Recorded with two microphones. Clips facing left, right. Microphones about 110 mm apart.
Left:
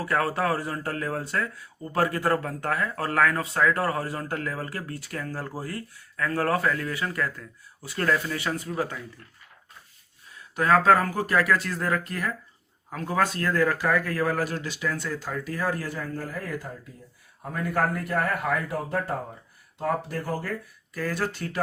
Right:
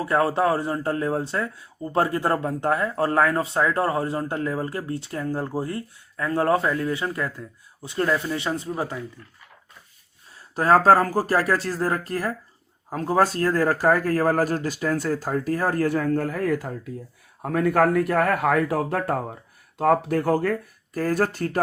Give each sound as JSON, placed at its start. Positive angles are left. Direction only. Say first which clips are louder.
{"t": 0.0, "sound": "speech", "louder": "right 5 dB", "side_deg": -25}
{"t": 10.3, "sound": "a man's voice", "louder": "right 3 dB", "side_deg": -35}
{"t": 20.9, "sound": "speech", "louder": "right 6 dB", "side_deg": -45}